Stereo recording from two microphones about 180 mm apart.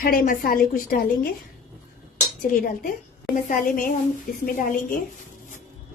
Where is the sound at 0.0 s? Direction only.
50° left (ahead or behind).